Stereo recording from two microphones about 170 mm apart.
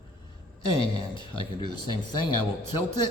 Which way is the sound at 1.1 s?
25° left (ahead or behind).